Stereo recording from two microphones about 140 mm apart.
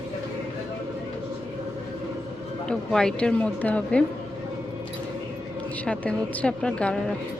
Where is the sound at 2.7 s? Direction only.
5° left (ahead or behind).